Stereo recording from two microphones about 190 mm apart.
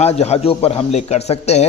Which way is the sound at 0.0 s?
35° left (ahead or behind).